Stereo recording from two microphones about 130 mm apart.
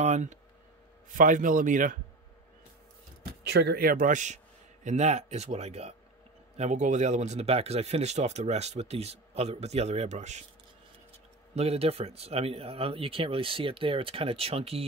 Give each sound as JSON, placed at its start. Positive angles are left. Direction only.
{"t": 0.0, "sound": "speech", "side_deg": -60}
{"t": 1.1, "sound": "a man's voice", "side_deg": -90}
{"t": 3.8, "sound": "a man's voice", "side_deg": -90}
{"t": 4.8, "sound": "speech", "side_deg": -60}
{"t": 11.5, "sound": "speech", "side_deg": -50}